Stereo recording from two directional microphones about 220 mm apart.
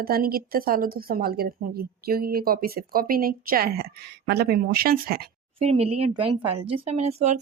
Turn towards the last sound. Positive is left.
turn(degrees=-30)  # may be behind; listen again after turning